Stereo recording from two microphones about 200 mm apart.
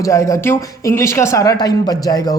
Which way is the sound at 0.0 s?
15° left (ahead or behind).